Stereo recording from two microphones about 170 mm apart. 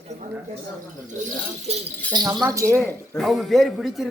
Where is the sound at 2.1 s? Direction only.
20° right (ahead or behind).